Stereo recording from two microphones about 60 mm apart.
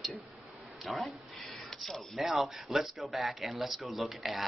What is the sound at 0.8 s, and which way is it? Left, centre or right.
Speech, centre.